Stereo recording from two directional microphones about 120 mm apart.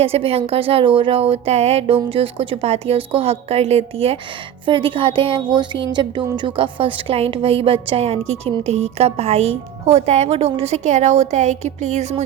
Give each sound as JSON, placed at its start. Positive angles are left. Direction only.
{"t": 0.0, "sound": "speech", "side_deg": -55}